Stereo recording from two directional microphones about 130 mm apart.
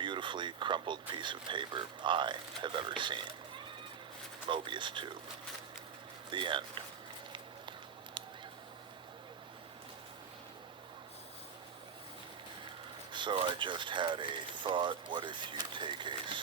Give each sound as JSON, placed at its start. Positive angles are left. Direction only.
{"t": 0.0, "sound": "speech", "side_deg": -40}
{"t": 4.4, "sound": "speech", "side_deg": -40}
{"t": 6.3, "sound": "speech", "side_deg": -40}
{"t": 13.1, "sound": "speech", "side_deg": -40}